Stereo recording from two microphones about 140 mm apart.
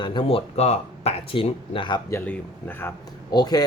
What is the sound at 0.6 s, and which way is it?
Speech, 50° left (ahead or behind).